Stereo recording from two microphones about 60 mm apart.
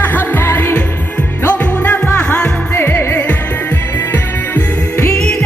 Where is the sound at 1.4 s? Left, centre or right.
Left.